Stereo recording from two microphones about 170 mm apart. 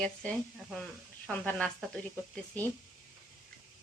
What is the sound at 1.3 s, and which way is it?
Speech, 5° left (ahead or behind).